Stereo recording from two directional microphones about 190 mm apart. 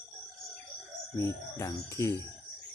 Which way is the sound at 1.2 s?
15° left (ahead or behind).